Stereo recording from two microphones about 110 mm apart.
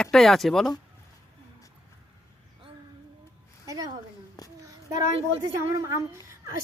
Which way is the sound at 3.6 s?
30° right (ahead or behind).